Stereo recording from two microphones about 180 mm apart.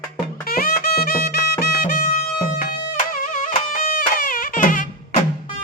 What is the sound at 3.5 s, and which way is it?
Music, 55° left (ahead or behind).